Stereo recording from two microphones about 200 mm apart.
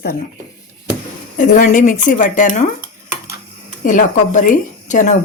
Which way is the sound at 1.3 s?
40° left (ahead or behind).